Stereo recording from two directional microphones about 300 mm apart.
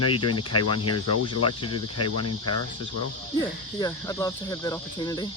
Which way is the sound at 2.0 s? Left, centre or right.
Left.